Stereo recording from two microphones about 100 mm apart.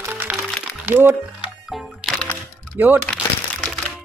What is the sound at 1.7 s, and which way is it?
Music, centre (ahead or behind).